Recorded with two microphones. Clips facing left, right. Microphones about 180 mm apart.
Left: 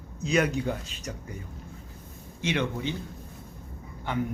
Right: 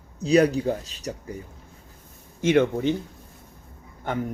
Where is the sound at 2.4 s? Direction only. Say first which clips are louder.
Right 9 dB; 45° right (ahead or behind).